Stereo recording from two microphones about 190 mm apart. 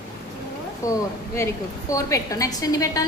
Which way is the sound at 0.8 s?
15° left (ahead or behind).